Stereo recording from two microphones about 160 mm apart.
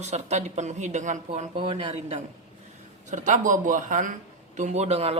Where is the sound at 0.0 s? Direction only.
45° right (ahead or behind).